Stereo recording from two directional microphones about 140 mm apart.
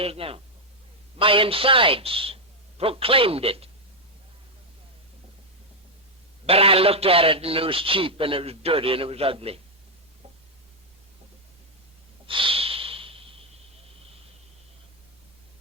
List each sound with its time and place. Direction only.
0.0 s a man's voice: 45° right (ahead or behind)
6.4 s a man's voice: 45° right (ahead or behind)
12.2 s snort: 40° right (ahead or behind)